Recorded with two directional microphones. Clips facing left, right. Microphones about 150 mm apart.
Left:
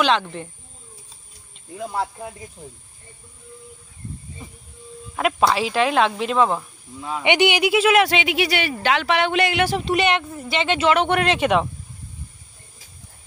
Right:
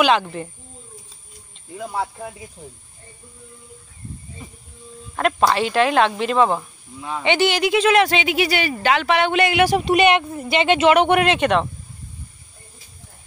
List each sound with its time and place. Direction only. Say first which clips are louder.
0.0 s speech: right 2 dB; 10° right (ahead or behind)
1.8 s speech: even; 5° right (ahead or behind)
5.1 s speech: right 1 dB; 5° left (ahead or behind)
7.2 s speech: even; 15° left (ahead or behind); by 9.7 s centre (ahead or behind)
9.7 s speech: right 4 dB; 15° right (ahead or behind)
11.2 s speech: right 1 dB; 5° left (ahead or behind)